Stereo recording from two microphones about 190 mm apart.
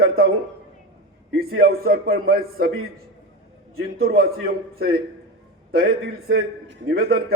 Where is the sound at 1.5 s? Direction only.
55° right (ahead or behind).